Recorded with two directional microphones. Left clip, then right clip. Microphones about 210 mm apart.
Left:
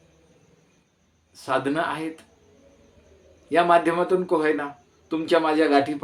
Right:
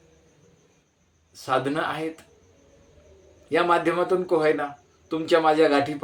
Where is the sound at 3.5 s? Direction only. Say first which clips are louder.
Left 3 dB; 5° left (ahead or behind).